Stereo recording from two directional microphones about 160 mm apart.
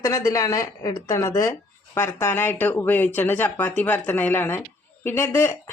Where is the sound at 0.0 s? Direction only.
20° left (ahead or behind).